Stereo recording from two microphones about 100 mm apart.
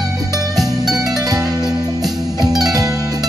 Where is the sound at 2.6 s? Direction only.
35° right (ahead or behind).